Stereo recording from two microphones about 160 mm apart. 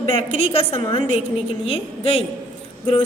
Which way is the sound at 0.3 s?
40° left (ahead or behind).